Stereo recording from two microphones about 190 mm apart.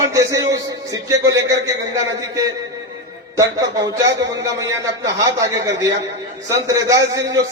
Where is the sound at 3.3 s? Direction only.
15° right (ahead or behind).